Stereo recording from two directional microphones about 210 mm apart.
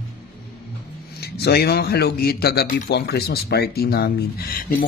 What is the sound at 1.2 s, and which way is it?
A man's voice, 50° left (ahead or behind).